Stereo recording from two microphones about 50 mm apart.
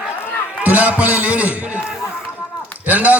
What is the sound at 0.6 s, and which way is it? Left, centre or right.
A man's voice, right.